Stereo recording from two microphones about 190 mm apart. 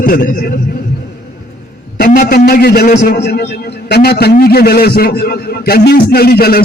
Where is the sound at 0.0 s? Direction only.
45° left (ahead or behind).